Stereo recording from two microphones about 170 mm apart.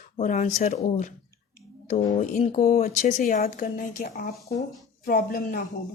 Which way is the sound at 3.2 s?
60° left (ahead or behind).